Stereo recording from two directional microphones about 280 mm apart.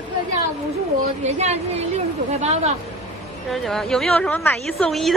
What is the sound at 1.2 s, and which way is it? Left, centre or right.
A woman's voice, right.